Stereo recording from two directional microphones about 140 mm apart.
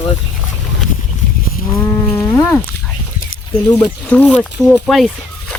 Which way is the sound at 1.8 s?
15° left (ahead or behind).